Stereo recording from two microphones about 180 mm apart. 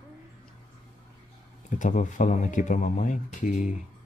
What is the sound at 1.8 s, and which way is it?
Speech, 45° left (ahead or behind).